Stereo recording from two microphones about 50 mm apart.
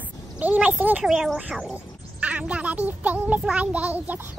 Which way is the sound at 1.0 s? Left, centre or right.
Centre.